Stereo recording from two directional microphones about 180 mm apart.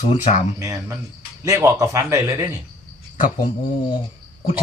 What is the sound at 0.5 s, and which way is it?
A man's voice, 15° right (ahead or behind).